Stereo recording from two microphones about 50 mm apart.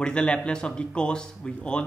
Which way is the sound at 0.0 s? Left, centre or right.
Centre.